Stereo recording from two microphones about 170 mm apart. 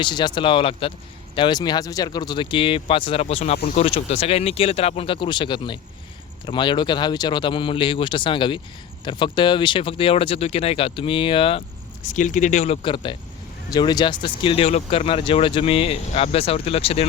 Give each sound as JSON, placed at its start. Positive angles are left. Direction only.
{"t": 0.0, "sound": "speech", "side_deg": 25}
{"t": 12.0, "sound": "speech", "side_deg": 50}